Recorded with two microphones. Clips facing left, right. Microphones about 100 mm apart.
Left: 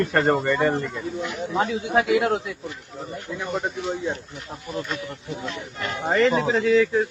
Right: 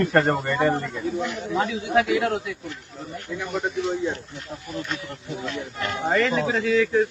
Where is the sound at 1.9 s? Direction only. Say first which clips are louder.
Left 1 dB; 30° left (ahead or behind).